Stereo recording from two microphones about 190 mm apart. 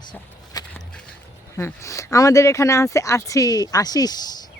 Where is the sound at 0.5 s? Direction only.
20° left (ahead or behind).